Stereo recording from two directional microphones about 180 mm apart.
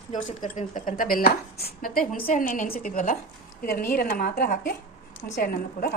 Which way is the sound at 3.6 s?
60° left (ahead or behind).